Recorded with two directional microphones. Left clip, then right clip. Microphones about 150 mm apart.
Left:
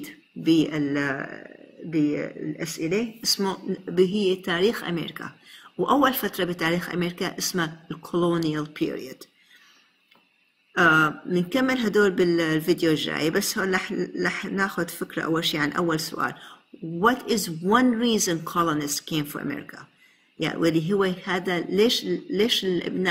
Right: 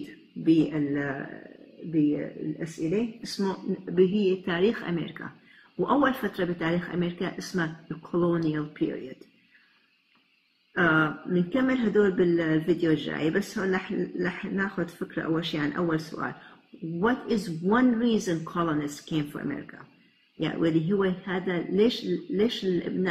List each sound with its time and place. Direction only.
0.7 s speech: 20° left (ahead or behind)
3.8 s a man's voice: 5° left (ahead or behind)
10.7 s a man's voice: 5° left (ahead or behind)